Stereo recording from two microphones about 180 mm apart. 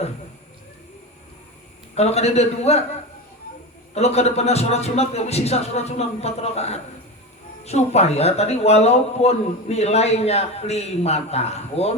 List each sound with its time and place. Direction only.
2.0 s speech: 35° left (ahead or behind)
3.9 s speech: 35° left (ahead or behind)